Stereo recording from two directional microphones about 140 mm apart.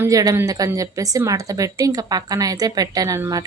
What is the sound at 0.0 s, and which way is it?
A woman's voice, 25° right (ahead or behind).